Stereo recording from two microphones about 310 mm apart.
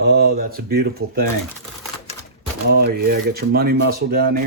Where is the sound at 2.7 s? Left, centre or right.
Right.